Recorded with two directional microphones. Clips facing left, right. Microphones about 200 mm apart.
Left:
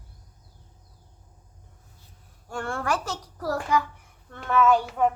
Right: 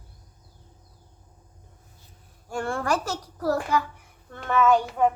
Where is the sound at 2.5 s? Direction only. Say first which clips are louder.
Right 2 dB; 10° right (ahead or behind).